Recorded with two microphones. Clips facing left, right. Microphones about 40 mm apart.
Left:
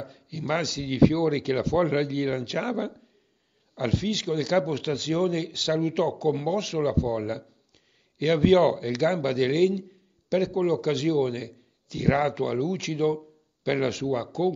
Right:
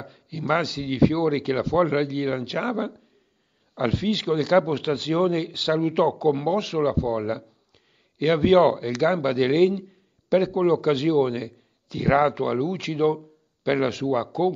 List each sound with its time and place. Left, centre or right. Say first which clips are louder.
0.0 s speech: right 2 dB; centre